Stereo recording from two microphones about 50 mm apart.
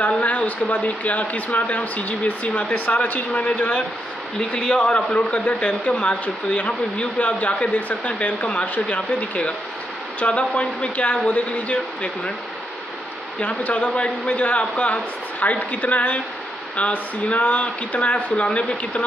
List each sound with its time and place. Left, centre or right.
0.2 s speech: left
13.4 s speech: left